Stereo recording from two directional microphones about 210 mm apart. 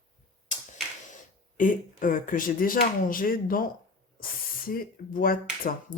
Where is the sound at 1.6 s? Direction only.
40° left (ahead or behind).